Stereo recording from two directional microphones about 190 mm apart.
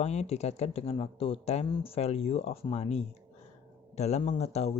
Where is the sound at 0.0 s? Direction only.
35° left (ahead or behind).